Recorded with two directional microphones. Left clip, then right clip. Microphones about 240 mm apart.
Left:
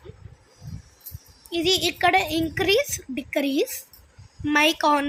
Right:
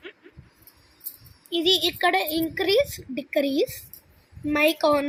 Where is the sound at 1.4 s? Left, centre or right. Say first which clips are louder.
Right 1 dB; left.